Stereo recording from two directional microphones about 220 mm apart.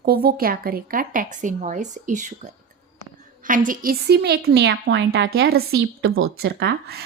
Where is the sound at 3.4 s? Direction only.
40° right (ahead or behind).